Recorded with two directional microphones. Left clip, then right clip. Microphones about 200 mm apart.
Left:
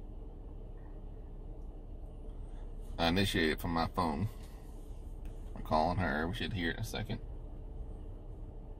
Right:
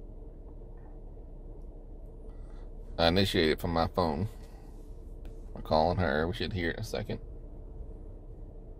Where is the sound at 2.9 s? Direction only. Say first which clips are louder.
Right 6 dB; 45° right (ahead or behind).